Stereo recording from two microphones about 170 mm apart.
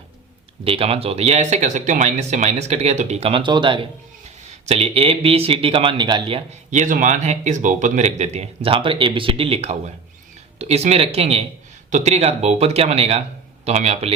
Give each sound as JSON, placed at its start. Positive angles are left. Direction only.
{"t": 0.6, "sound": "speech", "side_deg": -35}